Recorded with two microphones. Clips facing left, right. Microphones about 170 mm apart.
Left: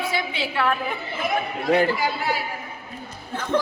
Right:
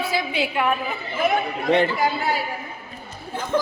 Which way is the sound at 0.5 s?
15° right (ahead or behind).